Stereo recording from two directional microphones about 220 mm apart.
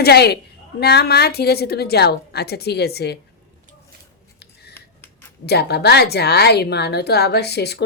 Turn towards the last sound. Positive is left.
turn(degrees=50)  # may be behind; listen again after turning